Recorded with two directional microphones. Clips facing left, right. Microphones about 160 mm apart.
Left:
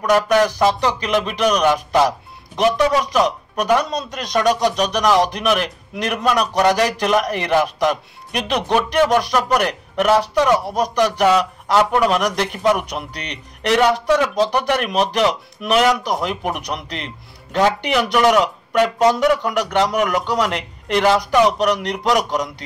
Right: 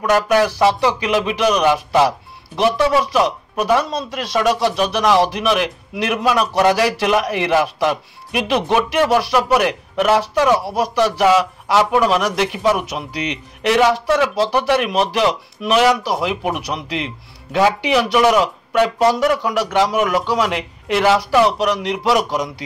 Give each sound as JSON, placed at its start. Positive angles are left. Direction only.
{"t": 0.1, "sound": "speech", "side_deg": -5}